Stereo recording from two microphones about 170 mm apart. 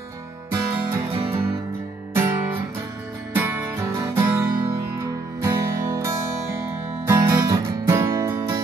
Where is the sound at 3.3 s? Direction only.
10° right (ahead or behind).